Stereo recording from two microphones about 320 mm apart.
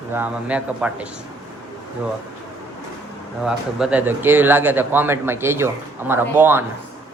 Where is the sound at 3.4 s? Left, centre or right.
Centre.